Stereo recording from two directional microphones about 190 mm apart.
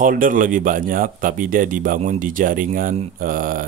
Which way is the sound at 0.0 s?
45° right (ahead or behind).